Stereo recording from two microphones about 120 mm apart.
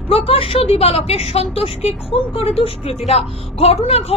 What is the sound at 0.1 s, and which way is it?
A woman's voice, 55° left (ahead or behind).